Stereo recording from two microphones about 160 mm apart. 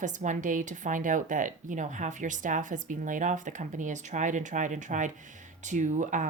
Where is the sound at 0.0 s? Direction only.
50° right (ahead or behind).